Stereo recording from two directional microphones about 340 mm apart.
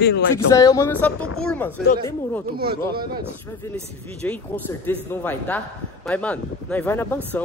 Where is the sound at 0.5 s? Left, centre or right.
Centre.